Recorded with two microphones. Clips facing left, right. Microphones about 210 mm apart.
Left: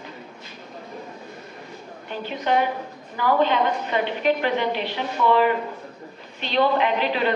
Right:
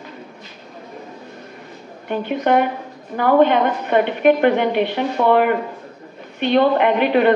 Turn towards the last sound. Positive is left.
turn(degrees=-55)  # may be behind; listen again after turning